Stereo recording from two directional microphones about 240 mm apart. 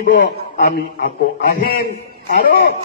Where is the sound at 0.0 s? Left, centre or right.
Left.